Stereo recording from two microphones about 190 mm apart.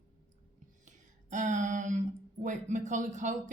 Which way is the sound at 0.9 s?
40° right (ahead or behind).